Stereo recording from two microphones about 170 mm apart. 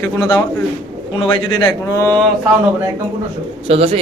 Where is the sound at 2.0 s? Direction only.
10° left (ahead or behind).